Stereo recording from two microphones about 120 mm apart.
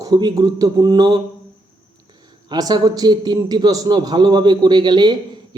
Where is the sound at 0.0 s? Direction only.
35° right (ahead or behind).